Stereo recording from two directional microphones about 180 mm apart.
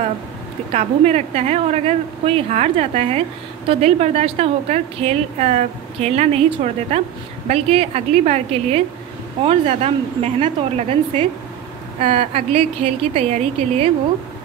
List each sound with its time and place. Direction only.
0.7 s a woman's voice: 35° right (ahead or behind)